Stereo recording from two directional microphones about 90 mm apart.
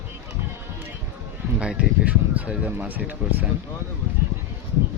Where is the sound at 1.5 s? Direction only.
10° right (ahead or behind).